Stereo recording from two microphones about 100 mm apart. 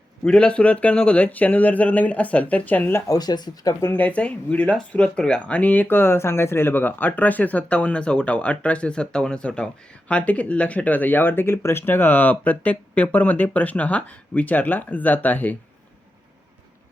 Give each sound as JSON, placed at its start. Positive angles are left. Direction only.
{"t": 0.3, "sound": "speech", "side_deg": 10}
{"t": 3.1, "sound": "speech", "side_deg": 40}
{"t": 3.8, "sound": "speech", "side_deg": 15}